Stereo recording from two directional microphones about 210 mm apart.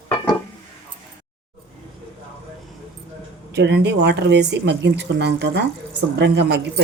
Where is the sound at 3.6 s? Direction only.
55° right (ahead or behind).